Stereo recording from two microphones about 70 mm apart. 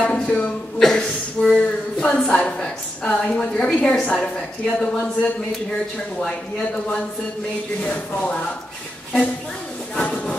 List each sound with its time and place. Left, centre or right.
0.0 s speech: centre
9.9 s speech: centre